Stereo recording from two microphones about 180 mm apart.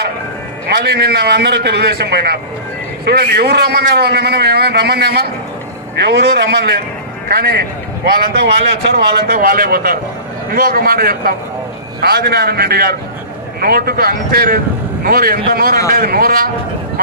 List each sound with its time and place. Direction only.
0.7 s a man's voice: 65° right (ahead or behind)
8.0 s a man's voice: 60° right (ahead or behind)